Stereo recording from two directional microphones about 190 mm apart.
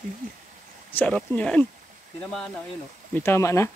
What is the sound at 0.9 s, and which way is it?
Speech, 5° left (ahead or behind).